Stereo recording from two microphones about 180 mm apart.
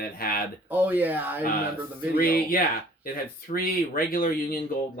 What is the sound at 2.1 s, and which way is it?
Speech, 55° left (ahead or behind).